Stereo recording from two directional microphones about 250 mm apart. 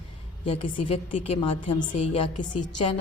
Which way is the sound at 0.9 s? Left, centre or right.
Left.